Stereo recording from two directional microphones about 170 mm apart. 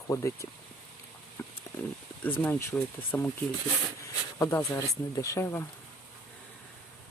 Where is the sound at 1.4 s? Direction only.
15° left (ahead or behind).